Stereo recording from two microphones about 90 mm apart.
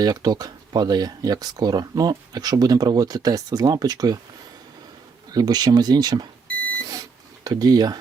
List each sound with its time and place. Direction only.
0.0 s speech: 45° right (ahead or behind)
5.3 s speech: 50° right (ahead or behind)
7.4 s speech: 45° right (ahead or behind)